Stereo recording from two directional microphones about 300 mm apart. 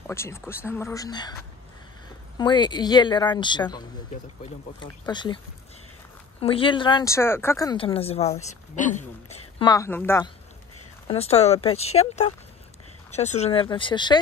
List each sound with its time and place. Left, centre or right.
0.0 s speech: centre
2.3 s speech: centre
6.4 s speech: centre
11.1 s speech: centre